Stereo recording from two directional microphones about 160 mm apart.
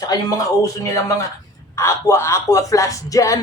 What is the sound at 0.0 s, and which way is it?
Speech, 25° left (ahead or behind).